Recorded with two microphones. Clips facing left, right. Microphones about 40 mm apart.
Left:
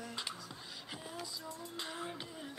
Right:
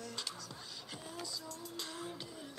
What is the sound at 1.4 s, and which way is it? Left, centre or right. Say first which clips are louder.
Child singing: left 2 dB; left.